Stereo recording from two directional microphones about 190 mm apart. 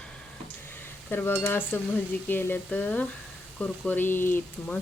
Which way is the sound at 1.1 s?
10° left (ahead or behind).